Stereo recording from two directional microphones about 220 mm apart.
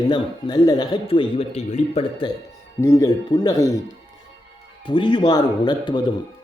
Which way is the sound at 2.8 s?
15° left (ahead or behind).